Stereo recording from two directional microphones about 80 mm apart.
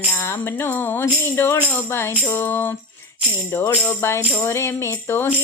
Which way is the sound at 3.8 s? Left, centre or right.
Left.